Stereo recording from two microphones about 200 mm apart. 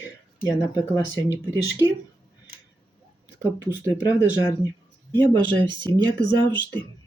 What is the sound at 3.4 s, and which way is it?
Speech, 15° right (ahead or behind).